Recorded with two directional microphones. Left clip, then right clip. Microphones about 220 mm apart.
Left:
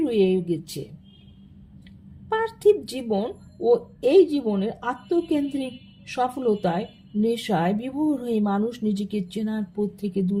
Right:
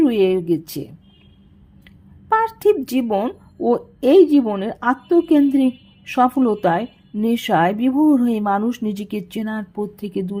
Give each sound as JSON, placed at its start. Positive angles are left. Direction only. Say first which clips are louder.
{"t": 0.0, "sound": "a woman's voice", "louder": "right 5 dB", "side_deg": -30}
{"t": 2.3, "sound": "speech", "louder": "right 4 dB", "side_deg": -30}